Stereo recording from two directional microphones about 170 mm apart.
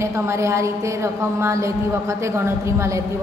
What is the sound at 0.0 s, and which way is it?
A woman's voice, 15° right (ahead or behind).